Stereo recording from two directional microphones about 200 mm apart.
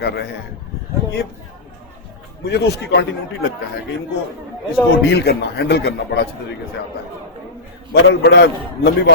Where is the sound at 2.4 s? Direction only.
55° left (ahead or behind).